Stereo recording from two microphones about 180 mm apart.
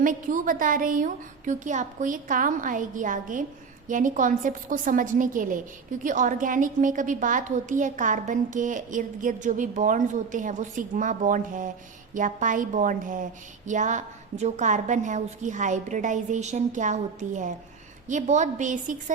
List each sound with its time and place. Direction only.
0.0 s a woman's voice: 50° right (ahead or behind)